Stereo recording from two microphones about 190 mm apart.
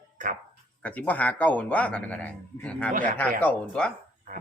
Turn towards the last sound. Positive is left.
turn(degrees=5)  # may be behind; listen again after turning